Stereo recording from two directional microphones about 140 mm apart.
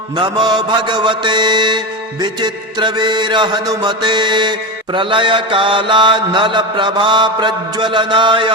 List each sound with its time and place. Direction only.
0.2 s music: 30° right (ahead or behind)